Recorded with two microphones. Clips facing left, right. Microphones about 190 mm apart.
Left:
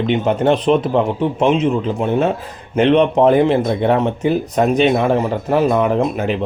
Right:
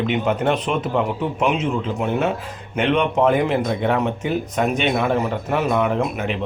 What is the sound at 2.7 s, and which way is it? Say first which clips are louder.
Speech: left 6 dB; 35° left (ahead or behind).